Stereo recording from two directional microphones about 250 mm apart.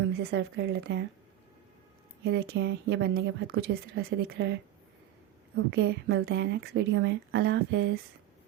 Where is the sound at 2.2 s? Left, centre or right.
Right.